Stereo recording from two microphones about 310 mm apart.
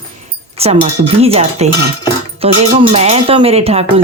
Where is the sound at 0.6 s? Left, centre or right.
Centre.